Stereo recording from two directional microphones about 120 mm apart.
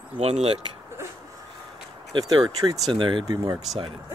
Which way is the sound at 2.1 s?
35° right (ahead or behind).